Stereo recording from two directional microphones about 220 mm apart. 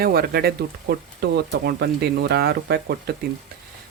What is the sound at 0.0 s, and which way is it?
Speech, 45° right (ahead or behind).